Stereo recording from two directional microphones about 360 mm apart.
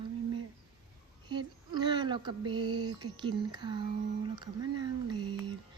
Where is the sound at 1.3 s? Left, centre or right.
Centre.